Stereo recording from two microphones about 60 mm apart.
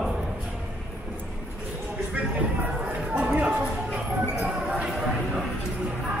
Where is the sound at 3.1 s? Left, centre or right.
Centre.